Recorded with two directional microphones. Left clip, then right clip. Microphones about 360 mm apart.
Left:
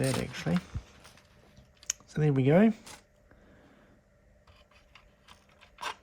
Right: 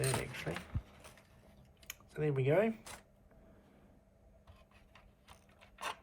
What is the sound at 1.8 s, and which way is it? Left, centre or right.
Speech, left.